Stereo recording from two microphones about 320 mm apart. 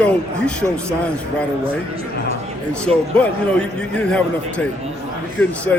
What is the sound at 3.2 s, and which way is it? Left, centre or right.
A man's voice, centre.